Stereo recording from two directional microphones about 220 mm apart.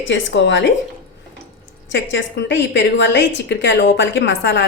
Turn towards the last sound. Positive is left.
turn(degrees=55)  # may be behind; listen again after turning